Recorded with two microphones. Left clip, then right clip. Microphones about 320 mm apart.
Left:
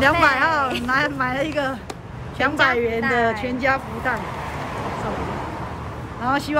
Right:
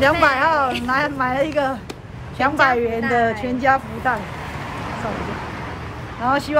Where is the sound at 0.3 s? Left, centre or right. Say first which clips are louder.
Right 2 dB; centre.